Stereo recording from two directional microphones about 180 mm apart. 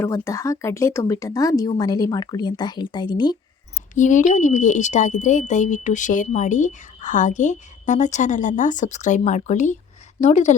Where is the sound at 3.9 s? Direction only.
45° left (ahead or behind).